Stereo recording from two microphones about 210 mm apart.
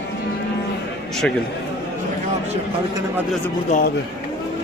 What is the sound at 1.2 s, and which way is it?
Speech, 5° left (ahead or behind).